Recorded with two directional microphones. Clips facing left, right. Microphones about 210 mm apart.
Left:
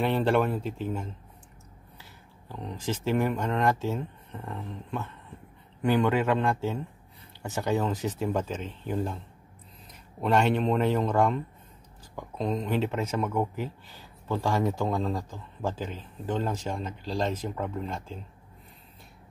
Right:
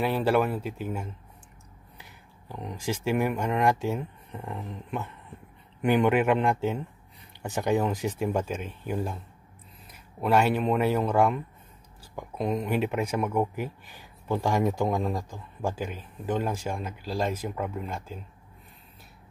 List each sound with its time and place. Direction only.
0.0 s speech: 5° right (ahead or behind)
10.2 s speech: 5° right (ahead or behind)